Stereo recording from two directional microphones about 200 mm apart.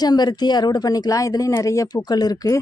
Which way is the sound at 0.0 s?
20° left (ahead or behind).